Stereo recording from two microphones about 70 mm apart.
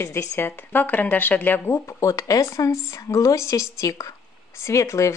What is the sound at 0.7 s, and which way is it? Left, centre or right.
Speech, left.